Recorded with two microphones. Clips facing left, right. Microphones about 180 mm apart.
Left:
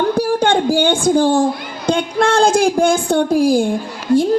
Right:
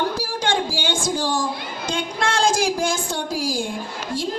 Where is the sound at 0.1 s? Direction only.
60° left (ahead or behind).